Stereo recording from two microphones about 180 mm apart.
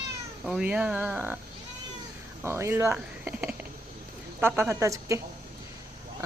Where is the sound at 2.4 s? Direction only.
15° right (ahead or behind).